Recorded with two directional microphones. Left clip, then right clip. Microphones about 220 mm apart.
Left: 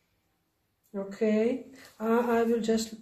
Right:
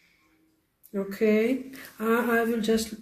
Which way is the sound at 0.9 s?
25° right (ahead or behind).